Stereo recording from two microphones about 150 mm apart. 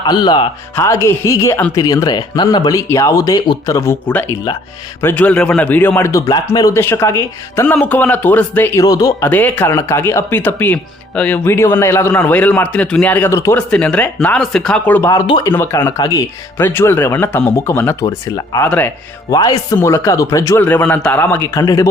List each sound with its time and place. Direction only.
0.0 s speech: 30° left (ahead or behind)
0.8 s speech: 20° left (ahead or behind)
8.8 s speech: 25° left (ahead or behind)
9.2 s speech: 10° left (ahead or behind)